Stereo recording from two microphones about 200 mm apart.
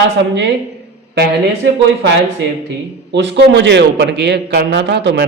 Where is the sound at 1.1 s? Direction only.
55° right (ahead or behind).